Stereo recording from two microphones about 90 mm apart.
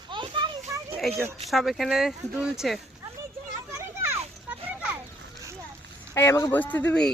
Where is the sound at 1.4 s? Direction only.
Centre (ahead or behind).